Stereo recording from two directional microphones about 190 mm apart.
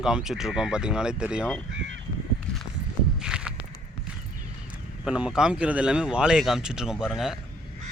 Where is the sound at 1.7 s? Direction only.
75° right (ahead or behind).